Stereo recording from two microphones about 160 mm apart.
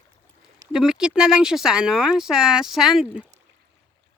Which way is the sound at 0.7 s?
5° right (ahead or behind).